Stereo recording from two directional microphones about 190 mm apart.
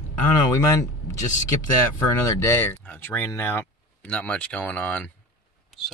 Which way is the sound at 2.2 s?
15° left (ahead or behind).